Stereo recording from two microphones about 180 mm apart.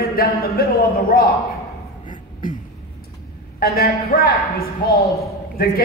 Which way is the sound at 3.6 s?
55° left (ahead or behind).